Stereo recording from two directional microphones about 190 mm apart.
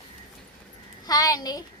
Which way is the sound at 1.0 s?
20° left (ahead or behind).